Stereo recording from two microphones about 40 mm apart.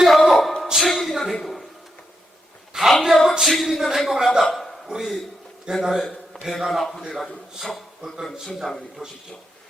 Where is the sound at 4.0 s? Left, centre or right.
Centre.